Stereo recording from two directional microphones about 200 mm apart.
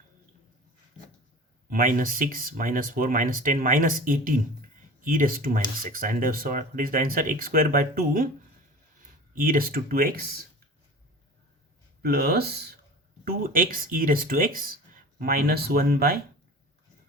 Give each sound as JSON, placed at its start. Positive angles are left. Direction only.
{"t": 1.7, "sound": "speech", "side_deg": -45}
{"t": 12.0, "sound": "speech", "side_deg": -50}